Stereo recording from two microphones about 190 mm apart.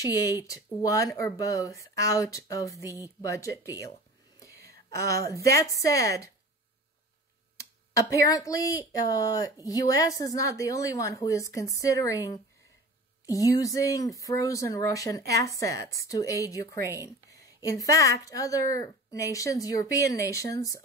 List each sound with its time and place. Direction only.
0.8 s speech: 20° left (ahead or behind)
4.4 s a sound: 15° left (ahead or behind)
5.2 s speech: 15° left (ahead or behind)
7.9 s speech: 15° left (ahead or behind)